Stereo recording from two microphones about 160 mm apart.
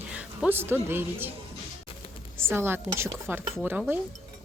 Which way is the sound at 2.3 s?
15° right (ahead or behind).